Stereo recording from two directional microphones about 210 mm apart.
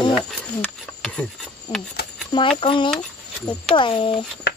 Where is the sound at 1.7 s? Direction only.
25° left (ahead or behind).